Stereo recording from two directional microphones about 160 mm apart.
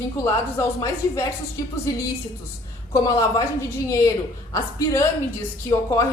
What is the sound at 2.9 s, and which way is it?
A woman's voice, 25° left (ahead or behind).